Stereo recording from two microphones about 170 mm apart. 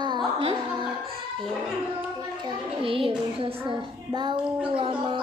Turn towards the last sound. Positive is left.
turn(degrees=-30)  # may be behind; listen again after turning